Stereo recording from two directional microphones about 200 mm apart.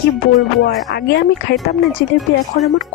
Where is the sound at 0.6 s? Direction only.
50° left (ahead or behind).